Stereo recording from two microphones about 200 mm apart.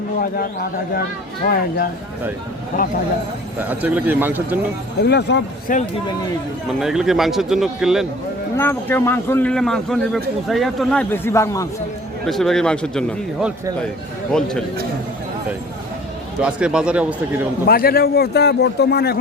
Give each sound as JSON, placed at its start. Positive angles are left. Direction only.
{"t": 0.2, "sound": "a man's voice", "side_deg": 50}
{"t": 3.6, "sound": "a man's voice", "side_deg": -10}
{"t": 5.0, "sound": "speech", "side_deg": 55}
{"t": 6.7, "sound": "a man's voice", "side_deg": 0}
{"t": 8.5, "sound": "a man's voice", "side_deg": 10}
{"t": 12.2, "sound": "a man's voice", "side_deg": 0}
{"t": 16.4, "sound": "a man's voice", "side_deg": -5}
{"t": 17.7, "sound": "a man's voice", "side_deg": 50}